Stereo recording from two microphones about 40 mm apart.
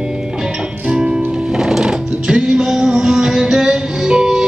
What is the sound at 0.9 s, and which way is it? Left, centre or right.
Music, centre.